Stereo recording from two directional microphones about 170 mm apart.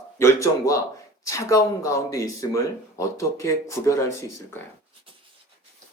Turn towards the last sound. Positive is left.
turn(degrees=15)  # may be behind; listen again after turning